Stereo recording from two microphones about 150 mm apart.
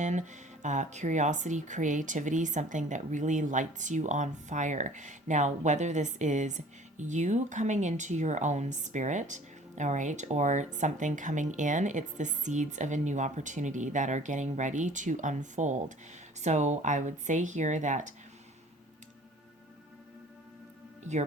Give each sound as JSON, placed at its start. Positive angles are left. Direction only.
{"t": 0.0, "sound": "speech", "side_deg": -55}